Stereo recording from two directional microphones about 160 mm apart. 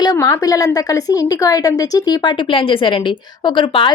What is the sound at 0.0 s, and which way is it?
A woman's voice, 20° left (ahead or behind).